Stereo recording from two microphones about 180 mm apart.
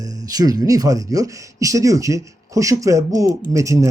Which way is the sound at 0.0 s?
20° right (ahead or behind).